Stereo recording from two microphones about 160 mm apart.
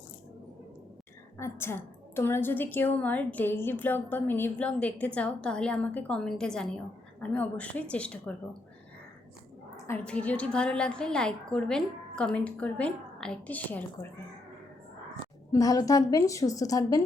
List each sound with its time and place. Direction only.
1.4 s a woman's voice: 15° left (ahead or behind)
9.7 s a woman's voice: 15° left (ahead or behind)
15.2 s a woman's voice: 20° left (ahead or behind)